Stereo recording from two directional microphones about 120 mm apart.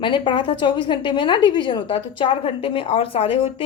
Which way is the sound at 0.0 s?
40° left (ahead or behind).